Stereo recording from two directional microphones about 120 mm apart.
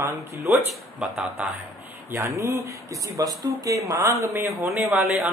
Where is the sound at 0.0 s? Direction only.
20° right (ahead or behind).